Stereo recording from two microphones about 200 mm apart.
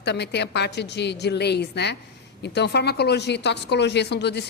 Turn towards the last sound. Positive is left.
turn(degrees=55)  # may be behind; listen again after turning